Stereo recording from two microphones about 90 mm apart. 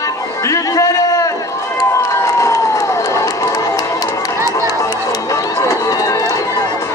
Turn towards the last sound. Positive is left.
turn(degrees=40)  # may be behind; listen again after turning